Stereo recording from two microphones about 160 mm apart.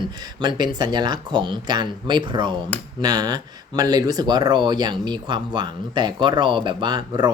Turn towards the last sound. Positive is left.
turn(degrees=-25)  # may be behind; listen again after turning